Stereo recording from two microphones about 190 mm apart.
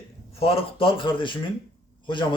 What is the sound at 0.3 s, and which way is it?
A man's voice, 30° left (ahead or behind).